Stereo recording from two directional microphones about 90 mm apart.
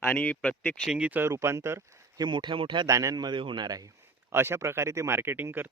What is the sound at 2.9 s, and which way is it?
Speech, 40° right (ahead or behind).